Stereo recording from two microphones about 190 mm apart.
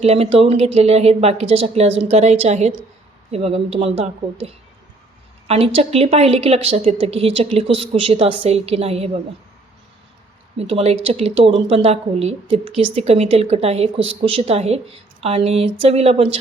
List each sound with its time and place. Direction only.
0.0 s speech: 30° right (ahead or behind)
10.6 s speech: 30° right (ahead or behind)